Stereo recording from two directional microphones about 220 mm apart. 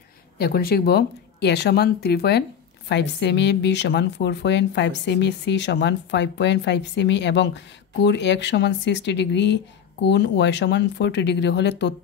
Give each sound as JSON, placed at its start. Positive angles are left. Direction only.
{"t": 0.4, "sound": "a woman's voice", "side_deg": 45}